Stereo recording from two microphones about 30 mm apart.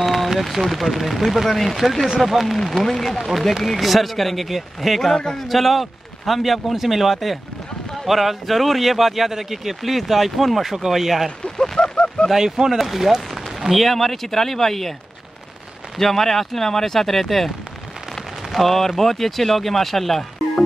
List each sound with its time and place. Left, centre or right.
0.0 s a sound: centre
0.3 s speech: centre
3.1 s speech: centre
11.2 s a sound: left
11.9 s a sound: left
12.3 s speech: centre
12.7 s speech: centre
16.0 s speech: centre
18.5 s speech: centre